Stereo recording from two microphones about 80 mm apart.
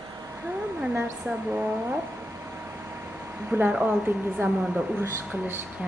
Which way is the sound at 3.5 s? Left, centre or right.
Centre.